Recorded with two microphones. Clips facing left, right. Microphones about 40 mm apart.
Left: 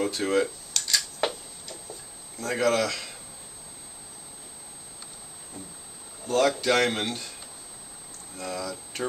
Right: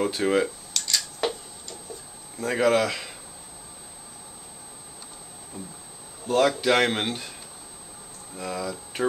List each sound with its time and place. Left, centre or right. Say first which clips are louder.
0.0 s speech: right 2 dB; centre
0.7 s a sound: left 2 dB; centre
2.3 s speech: right 3 dB; centre
6.2 s speech: right 2 dB; centre
8.4 s speech: right 2 dB; centre